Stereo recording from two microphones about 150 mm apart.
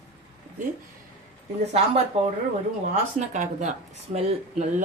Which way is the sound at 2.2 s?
40° right (ahead or behind).